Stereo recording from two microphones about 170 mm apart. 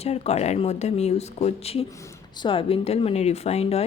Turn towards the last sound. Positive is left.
turn(degrees=35)  # may be behind; listen again after turning